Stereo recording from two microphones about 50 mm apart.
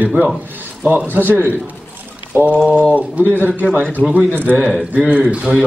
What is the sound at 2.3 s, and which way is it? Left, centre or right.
A man's voice, right.